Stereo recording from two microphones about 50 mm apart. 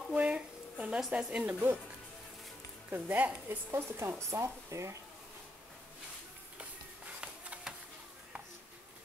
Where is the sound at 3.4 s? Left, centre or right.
Right.